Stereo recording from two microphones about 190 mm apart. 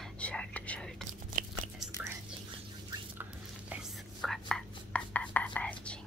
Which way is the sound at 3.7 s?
Centre (ahead or behind).